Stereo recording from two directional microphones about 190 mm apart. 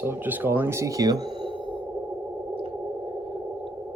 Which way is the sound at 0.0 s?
10° right (ahead or behind).